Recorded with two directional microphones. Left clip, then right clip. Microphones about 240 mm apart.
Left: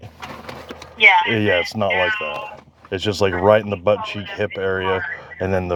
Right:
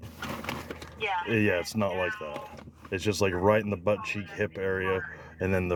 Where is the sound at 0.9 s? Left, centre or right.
Left.